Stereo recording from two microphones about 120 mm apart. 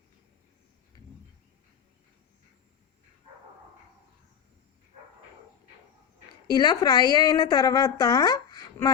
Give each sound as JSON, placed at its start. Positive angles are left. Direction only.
{"t": 6.5, "sound": "a woman's voice", "side_deg": 35}